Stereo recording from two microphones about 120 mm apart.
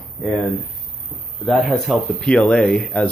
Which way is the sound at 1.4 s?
5° left (ahead or behind).